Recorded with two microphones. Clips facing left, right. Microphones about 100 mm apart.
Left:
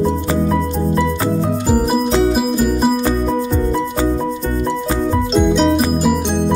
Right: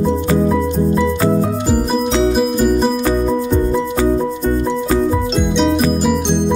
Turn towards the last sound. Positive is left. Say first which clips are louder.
# left 2 dB
turn(degrees=0)  # may be behind; listen again after turning